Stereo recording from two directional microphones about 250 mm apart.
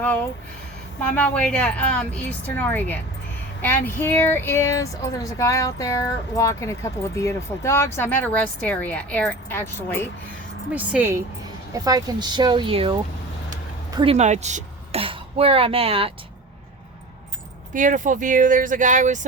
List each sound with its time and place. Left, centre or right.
1.1 s speech: centre
10.8 s speech: centre
13.9 s a woman's voice: right
17.7 s speech: right